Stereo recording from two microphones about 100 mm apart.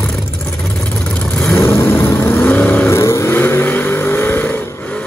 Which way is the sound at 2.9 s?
30° left (ahead or behind).